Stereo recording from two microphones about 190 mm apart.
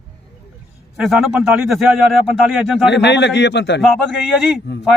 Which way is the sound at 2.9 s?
65° left (ahead or behind).